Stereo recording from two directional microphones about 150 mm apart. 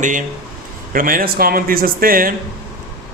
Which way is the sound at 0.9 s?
70° right (ahead or behind).